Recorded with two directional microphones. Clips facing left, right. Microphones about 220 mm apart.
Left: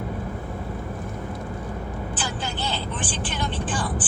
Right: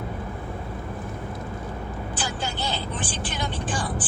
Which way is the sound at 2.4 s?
10° right (ahead or behind).